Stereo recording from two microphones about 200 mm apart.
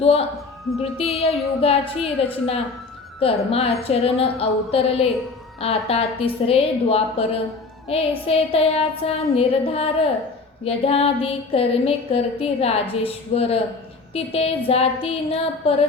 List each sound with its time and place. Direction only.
0.0 s music: 30° left (ahead or behind)
3.2 s music: 30° left (ahead or behind)